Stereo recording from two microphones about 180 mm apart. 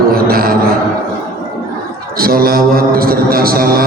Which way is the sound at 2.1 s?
55° right (ahead or behind).